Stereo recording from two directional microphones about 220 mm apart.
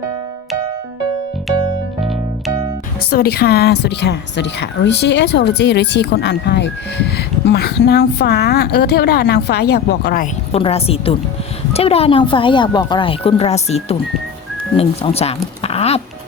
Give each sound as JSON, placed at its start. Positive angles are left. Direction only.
{"t": 3.1, "sound": "a woman's voice", "side_deg": 45}
{"t": 10.5, "sound": "speech", "side_deg": 25}
{"t": 15.6, "sound": "music", "side_deg": 30}